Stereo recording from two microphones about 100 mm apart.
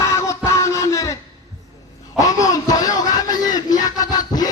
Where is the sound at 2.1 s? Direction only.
35° left (ahead or behind).